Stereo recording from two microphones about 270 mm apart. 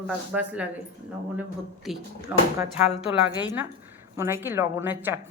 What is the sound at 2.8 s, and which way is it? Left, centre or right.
Speech, left.